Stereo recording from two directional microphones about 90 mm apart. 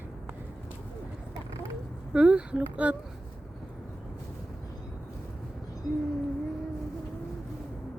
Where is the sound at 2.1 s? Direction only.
10° right (ahead or behind).